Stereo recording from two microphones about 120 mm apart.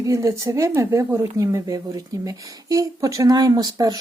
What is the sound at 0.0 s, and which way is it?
Speech, 25° right (ahead or behind).